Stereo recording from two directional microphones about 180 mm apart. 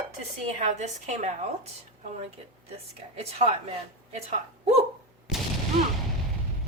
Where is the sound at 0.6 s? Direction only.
40° right (ahead or behind).